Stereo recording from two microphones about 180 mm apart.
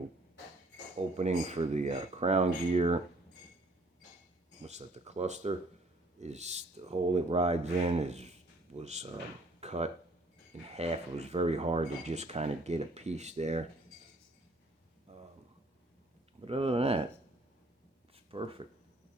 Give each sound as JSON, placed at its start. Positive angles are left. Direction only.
{"t": 1.1, "sound": "speech", "side_deg": -35}
{"t": 4.6, "sound": "speech", "side_deg": -40}
{"t": 9.6, "sound": "a sound", "side_deg": -35}
{"t": 10.8, "sound": "speech", "side_deg": -35}
{"t": 16.5, "sound": "speech", "side_deg": -35}
{"t": 18.1, "sound": "a sound", "side_deg": -30}